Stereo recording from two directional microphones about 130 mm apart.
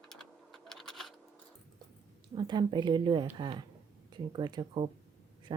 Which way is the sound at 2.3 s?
35° right (ahead or behind).